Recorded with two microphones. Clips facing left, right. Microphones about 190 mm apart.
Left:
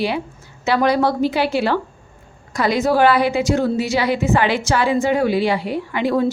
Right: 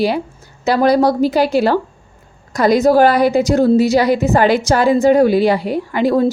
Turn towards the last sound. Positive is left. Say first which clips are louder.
# right 4 dB
turn(degrees=-40)  # may be behind; listen again after turning